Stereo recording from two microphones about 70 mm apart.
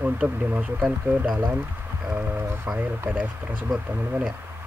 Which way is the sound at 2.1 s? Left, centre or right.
Right.